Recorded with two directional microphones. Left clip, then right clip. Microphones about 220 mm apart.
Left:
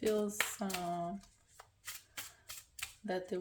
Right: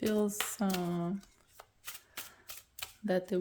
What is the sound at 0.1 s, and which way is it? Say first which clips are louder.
Speech: right 1 dB; 50° right (ahead or behind).